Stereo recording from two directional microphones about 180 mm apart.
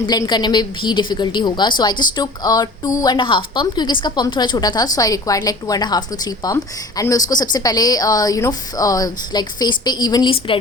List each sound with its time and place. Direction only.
0.0 s a woman's voice: 25° left (ahead or behind)